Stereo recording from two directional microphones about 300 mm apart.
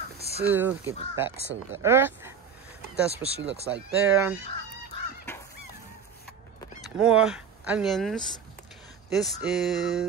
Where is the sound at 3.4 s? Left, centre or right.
Right.